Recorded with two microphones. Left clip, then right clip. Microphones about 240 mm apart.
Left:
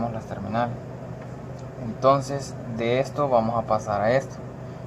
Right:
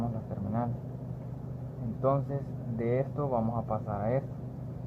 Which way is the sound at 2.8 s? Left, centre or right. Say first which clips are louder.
Left 8 dB; centre.